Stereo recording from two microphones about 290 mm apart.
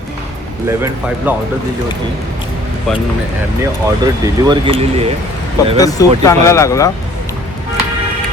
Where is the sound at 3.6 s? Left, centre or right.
Centre.